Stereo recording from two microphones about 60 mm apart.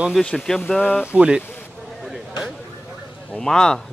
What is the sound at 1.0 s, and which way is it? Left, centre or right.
Speech, centre.